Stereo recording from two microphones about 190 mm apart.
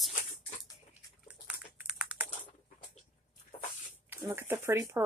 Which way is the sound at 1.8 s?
5° right (ahead or behind).